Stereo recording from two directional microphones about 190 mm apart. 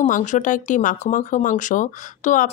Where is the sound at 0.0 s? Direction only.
40° left (ahead or behind).